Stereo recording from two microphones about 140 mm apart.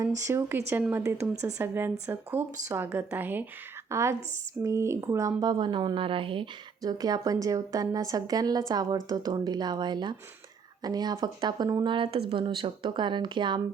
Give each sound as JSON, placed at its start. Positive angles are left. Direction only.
{"t": 0.3, "sound": "a woman's voice", "side_deg": -15}